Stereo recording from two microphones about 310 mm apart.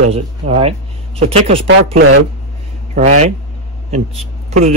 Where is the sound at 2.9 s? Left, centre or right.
Right.